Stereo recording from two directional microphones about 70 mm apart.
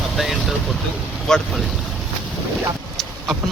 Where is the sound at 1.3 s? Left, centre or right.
Centre.